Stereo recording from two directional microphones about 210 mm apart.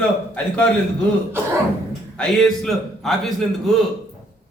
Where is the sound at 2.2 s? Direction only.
5° left (ahead or behind).